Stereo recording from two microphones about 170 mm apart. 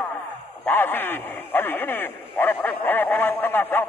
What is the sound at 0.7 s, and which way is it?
Speech, 10° left (ahead or behind).